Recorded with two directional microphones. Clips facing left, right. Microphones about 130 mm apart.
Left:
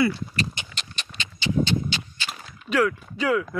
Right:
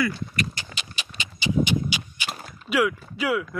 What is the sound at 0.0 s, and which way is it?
Speech, 25° left (ahead or behind).